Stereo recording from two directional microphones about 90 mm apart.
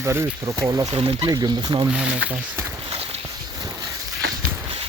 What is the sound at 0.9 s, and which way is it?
Speech, 70° right (ahead or behind).